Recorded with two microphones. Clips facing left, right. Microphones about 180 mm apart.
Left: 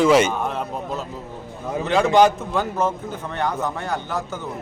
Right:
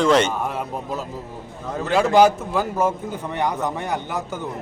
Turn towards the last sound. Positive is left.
turn(degrees=-15)  # may be behind; listen again after turning